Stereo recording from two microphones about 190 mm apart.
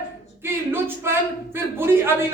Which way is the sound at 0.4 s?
10° right (ahead or behind).